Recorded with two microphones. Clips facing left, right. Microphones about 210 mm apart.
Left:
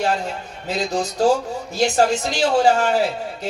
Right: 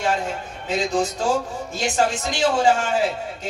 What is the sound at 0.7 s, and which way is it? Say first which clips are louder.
Speech: right 1 dB; 40° left (ahead or behind).